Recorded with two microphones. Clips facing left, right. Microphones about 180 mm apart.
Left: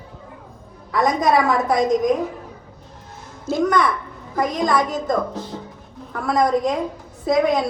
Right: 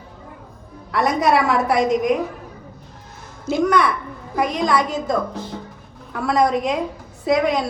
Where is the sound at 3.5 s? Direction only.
20° right (ahead or behind).